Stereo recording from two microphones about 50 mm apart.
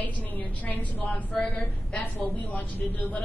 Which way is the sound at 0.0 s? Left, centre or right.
Left.